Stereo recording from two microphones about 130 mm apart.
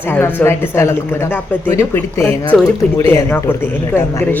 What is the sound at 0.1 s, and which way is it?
Speech, 15° left (ahead or behind).